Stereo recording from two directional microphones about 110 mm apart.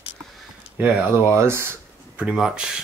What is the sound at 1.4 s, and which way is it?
Speech, 25° right (ahead or behind).